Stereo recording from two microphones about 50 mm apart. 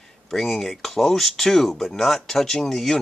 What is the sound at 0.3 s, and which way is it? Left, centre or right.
Speech, centre.